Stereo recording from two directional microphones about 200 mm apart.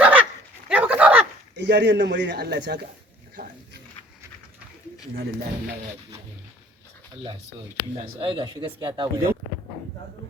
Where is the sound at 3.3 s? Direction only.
55° right (ahead or behind).